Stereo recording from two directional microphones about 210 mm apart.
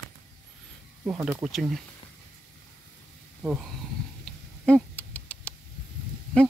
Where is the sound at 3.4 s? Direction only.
Centre (ahead or behind).